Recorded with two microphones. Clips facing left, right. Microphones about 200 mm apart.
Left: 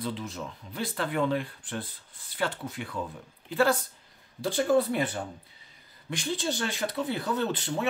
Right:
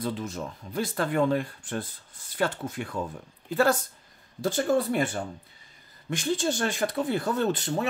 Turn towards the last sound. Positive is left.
turn(degrees=-40)  # may be behind; listen again after turning